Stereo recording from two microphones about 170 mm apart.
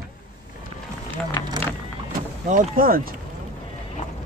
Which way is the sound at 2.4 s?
50° right (ahead or behind).